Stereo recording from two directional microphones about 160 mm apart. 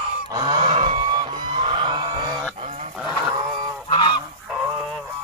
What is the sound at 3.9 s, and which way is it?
Goose, 30° left (ahead or behind).